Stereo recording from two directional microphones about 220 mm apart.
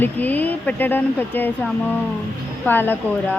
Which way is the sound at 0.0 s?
10° left (ahead or behind).